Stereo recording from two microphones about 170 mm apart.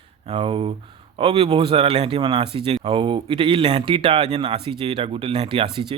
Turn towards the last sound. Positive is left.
turn(degrees=-30)  # may be behind; listen again after turning